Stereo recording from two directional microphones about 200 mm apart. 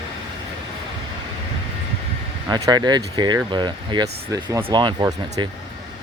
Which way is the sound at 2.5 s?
20° right (ahead or behind).